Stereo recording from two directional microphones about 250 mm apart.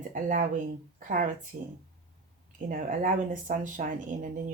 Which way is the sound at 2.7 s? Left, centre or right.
Right.